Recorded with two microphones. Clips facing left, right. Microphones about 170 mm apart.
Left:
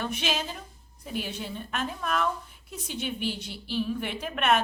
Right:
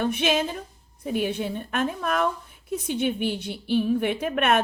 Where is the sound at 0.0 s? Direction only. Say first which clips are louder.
Right 7 dB; 55° right (ahead or behind).